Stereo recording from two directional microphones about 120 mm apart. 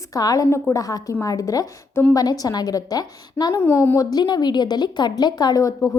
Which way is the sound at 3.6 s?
20° left (ahead or behind).